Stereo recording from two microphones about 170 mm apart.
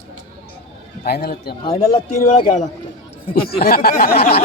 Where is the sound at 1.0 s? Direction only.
65° left (ahead or behind).